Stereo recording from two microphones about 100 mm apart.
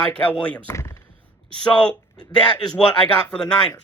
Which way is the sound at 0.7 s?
30° left (ahead or behind).